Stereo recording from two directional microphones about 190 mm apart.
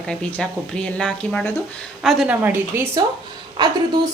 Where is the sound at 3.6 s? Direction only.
20° right (ahead or behind).